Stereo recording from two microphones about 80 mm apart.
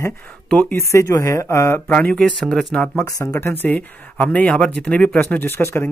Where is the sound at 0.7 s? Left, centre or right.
Left.